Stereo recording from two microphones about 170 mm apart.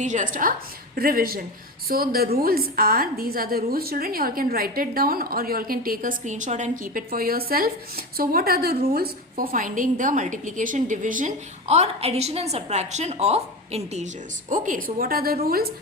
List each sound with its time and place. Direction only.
0.0 s a woman's voice: 45° right (ahead or behind)
0.9 s a woman's voice: 60° right (ahead or behind); by 14.1 s 40° right (ahead or behind)
14.5 s a woman's voice: 50° right (ahead or behind)